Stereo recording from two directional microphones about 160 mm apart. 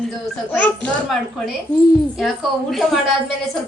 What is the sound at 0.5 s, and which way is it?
Speech, 10° left (ahead or behind).